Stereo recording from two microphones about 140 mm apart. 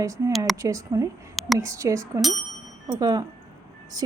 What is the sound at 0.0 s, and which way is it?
A woman's voice, 25° right (ahead or behind).